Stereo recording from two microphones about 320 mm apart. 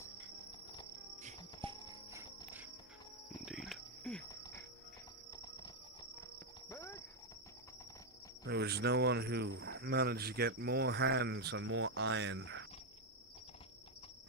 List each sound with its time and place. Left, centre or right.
1.2 s cricket: right
3.4 s cricket: centre
6.7 s horse: centre
8.4 s speech: right